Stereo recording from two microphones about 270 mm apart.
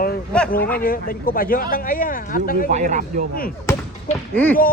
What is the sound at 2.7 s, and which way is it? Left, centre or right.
Speech, right.